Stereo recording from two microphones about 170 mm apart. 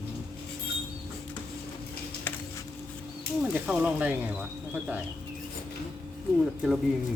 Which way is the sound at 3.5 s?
5° right (ahead or behind).